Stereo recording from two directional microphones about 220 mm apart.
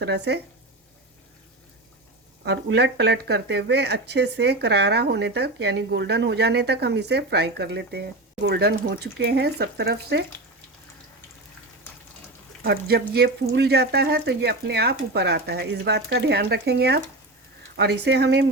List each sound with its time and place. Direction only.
0.0 s speech: 50° right (ahead or behind)
2.4 s speech: 50° right (ahead or behind)
12.6 s speech: 45° right (ahead or behind)